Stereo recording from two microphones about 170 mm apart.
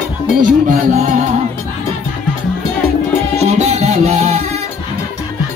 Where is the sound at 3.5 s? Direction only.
40° right (ahead or behind).